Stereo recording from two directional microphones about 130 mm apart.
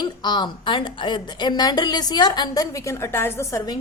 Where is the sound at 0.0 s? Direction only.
35° left (ahead or behind).